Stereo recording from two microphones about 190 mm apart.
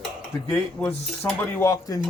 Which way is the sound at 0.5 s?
10° left (ahead or behind).